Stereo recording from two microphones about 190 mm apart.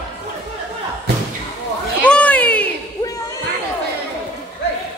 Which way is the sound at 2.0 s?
5° left (ahead or behind).